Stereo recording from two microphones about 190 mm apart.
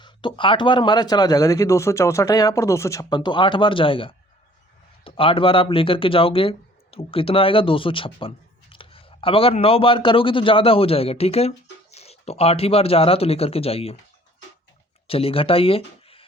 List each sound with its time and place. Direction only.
0.0 s speech: 25° left (ahead or behind)
15.0 s speech: 30° left (ahead or behind)